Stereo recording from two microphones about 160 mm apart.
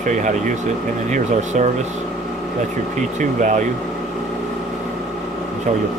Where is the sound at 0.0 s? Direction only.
50° right (ahead or behind).